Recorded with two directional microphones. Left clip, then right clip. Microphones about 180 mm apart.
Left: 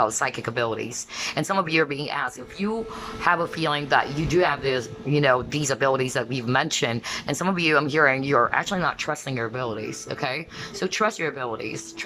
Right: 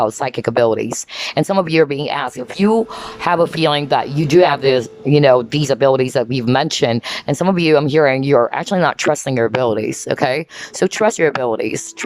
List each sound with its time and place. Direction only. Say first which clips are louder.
0.0 s speech: right 6 dB; 25° right (ahead or behind)